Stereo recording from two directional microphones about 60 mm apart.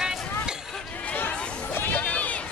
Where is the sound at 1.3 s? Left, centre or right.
Left.